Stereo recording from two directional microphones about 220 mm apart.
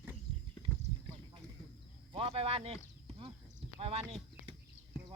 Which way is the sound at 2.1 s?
25° right (ahead or behind).